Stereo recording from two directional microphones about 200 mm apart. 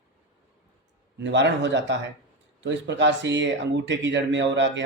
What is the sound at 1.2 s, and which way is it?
Speech, 60° right (ahead or behind).